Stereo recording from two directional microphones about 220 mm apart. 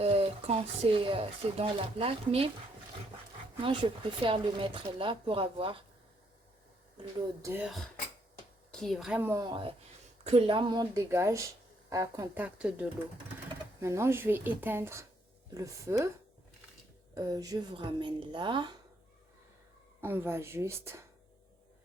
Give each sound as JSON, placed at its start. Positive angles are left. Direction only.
{"t": 0.0, "sound": "speech", "side_deg": -25}
{"t": 3.6, "sound": "speech", "side_deg": -25}
{"t": 7.4, "sound": "a woman's voice", "side_deg": -5}
{"t": 13.8, "sound": "a woman's voice", "side_deg": -10}
{"t": 17.2, "sound": "speech", "side_deg": -15}
{"t": 20.0, "sound": "a woman's voice", "side_deg": -10}